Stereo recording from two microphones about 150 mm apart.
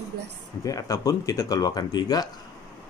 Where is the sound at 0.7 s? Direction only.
25° left (ahead or behind).